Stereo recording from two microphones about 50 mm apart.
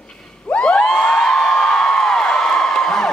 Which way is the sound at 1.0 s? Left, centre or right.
Centre.